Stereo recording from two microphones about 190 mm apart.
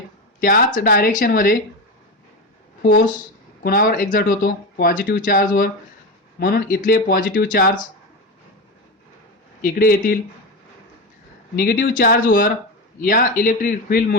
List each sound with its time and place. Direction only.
0.3 s speech: 45° left (ahead or behind)
2.8 s speech: 50° left (ahead or behind)
9.6 s speech: 50° left (ahead or behind)
11.5 s speech: 55° left (ahead or behind)